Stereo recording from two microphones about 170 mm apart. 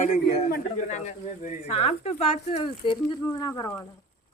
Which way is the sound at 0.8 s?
45° left (ahead or behind).